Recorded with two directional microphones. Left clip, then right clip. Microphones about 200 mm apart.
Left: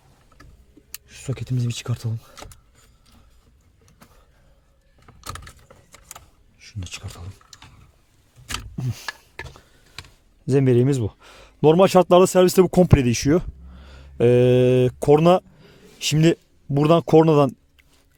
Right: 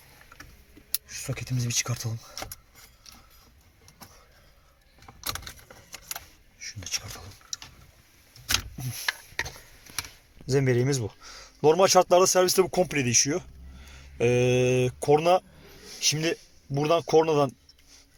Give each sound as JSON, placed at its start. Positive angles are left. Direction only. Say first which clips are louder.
{"t": 1.0, "sound": "speech", "louder": "left 2 dB", "side_deg": 45}
{"t": 6.6, "sound": "bee", "louder": "right 3 dB", "side_deg": 50}
{"t": 10.5, "sound": "speech", "louder": "left 6 dB", "side_deg": 60}